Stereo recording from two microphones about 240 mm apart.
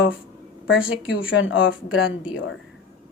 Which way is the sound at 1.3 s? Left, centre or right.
Left.